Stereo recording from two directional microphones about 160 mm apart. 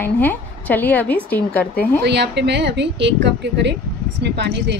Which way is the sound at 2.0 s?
90° right.